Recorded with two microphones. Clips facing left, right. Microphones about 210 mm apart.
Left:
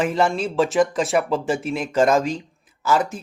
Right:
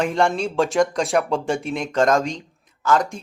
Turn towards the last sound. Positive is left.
turn(degrees=5)  # may be behind; listen again after turning